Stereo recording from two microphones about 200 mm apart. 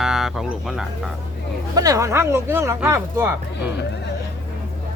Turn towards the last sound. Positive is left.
turn(degrees=-10)  # may be behind; listen again after turning